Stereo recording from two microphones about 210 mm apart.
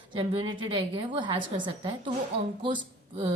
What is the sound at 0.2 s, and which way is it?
A woman's voice, 25° right (ahead or behind).